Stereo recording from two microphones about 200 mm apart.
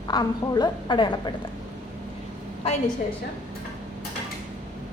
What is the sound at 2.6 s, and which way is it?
Speech, 30° left (ahead or behind).